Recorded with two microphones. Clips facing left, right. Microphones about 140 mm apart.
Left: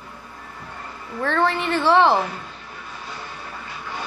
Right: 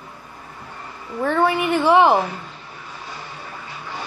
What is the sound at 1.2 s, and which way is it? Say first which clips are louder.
A woman's voice: right 3 dB; 10° right (ahead or behind).